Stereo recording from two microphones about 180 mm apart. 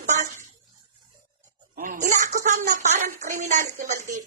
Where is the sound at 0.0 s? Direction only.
45° right (ahead or behind).